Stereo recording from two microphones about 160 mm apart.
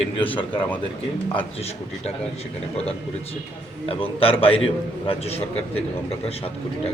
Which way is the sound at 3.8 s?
35° left (ahead or behind).